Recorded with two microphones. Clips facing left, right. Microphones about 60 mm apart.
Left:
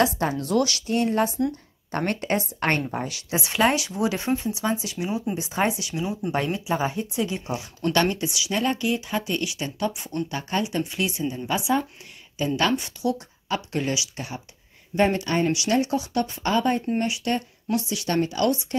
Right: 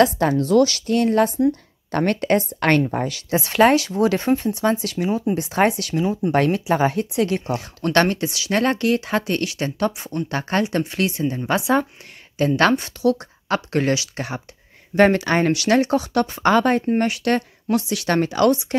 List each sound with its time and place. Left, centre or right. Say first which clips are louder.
0.0 s a woman's voice: right 6 dB; right
0.9 s a woman's voice: right 5 dB; right
2.8 s speech: right 7 dB; right
3.5 s a woman's voice: right 7 dB; right
12.4 s speech: right 6 dB; right